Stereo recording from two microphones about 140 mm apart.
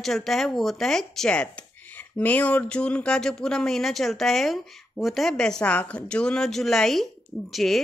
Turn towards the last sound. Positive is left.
turn(degrees=0)  # may be behind; listen again after turning